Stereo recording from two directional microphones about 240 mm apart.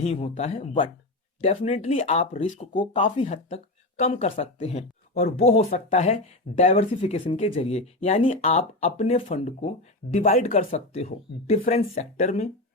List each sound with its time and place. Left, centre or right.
0.0 s speech: left